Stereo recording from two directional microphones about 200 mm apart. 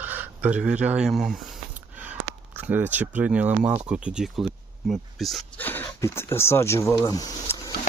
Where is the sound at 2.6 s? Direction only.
10° right (ahead or behind); by 7.6 s 20° left (ahead or behind).